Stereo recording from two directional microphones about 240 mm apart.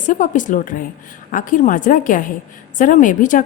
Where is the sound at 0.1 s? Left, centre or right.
Left.